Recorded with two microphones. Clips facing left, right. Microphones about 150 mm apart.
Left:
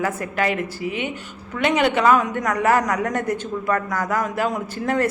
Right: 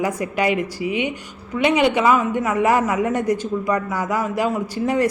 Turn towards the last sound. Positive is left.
turn(degrees=-10)  # may be behind; listen again after turning